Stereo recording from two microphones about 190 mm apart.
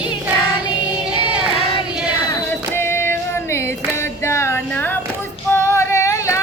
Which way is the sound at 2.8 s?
10° left (ahead or behind).